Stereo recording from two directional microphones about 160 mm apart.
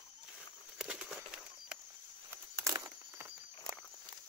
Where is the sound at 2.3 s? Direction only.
20° right (ahead or behind).